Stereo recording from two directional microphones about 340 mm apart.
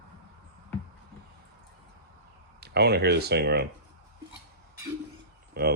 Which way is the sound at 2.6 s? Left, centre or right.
Right.